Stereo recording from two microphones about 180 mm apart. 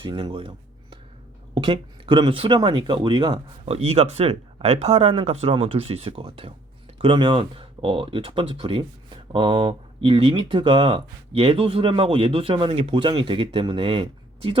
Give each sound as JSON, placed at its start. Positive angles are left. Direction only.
{"t": 0.0, "sound": "speech", "side_deg": -25}